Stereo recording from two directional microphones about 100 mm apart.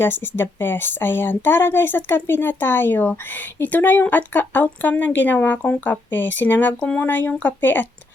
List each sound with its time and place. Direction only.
0.0 s speech: 20° left (ahead or behind)